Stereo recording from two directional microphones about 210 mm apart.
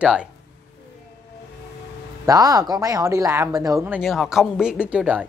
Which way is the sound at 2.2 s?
15° right (ahead or behind).